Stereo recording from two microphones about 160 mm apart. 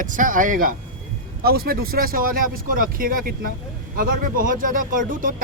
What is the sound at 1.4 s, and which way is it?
Speech, 70° right (ahead or behind).